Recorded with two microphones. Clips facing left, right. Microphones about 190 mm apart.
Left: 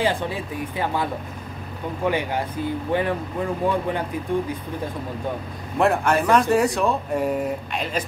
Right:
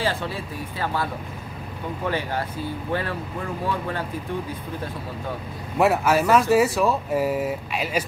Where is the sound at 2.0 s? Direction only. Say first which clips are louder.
Left 3 dB; 15° left (ahead or behind).